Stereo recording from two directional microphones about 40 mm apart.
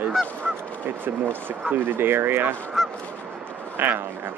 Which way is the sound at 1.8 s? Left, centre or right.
Right.